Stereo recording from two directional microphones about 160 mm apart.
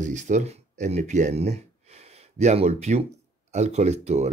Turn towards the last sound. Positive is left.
turn(degrees=-45)  # may be behind; listen again after turning